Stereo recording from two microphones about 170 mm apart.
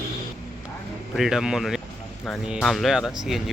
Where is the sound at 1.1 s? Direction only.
Centre (ahead or behind).